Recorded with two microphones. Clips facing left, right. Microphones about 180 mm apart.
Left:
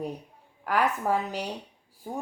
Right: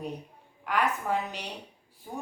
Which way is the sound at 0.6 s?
40° left (ahead or behind).